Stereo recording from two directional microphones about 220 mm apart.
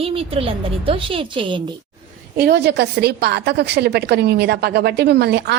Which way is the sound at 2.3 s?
50° right (ahead or behind).